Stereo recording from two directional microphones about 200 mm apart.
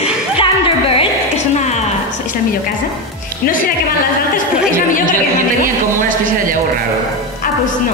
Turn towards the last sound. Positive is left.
turn(degrees=-45)  # may be behind; listen again after turning